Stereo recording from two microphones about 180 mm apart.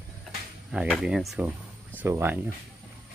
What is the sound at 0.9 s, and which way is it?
Speech, centre (ahead or behind).